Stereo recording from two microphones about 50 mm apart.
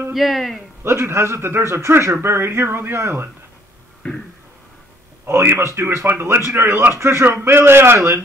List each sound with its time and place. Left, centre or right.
0.1 s a man's voice: centre
0.8 s a man's voice: right
4.0 s a sound: left
5.2 s a man's voice: right
6.0 s a man's voice: right